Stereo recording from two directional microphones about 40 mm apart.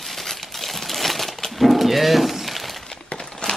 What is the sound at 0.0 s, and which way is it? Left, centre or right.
Crumpling, centre.